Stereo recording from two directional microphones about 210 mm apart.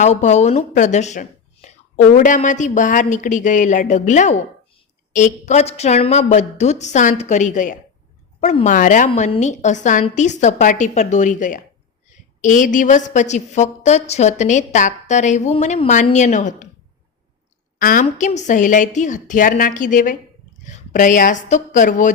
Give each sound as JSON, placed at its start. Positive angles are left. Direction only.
{"t": 0.0, "sound": "a woman's voice", "side_deg": 35}
{"t": 17.7, "sound": "a woman's voice", "side_deg": 40}